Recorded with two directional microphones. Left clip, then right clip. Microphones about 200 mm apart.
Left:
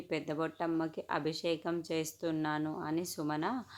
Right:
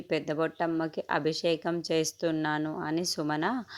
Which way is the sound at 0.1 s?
25° right (ahead or behind).